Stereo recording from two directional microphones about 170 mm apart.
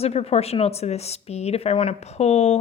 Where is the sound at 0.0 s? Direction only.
35° left (ahead or behind).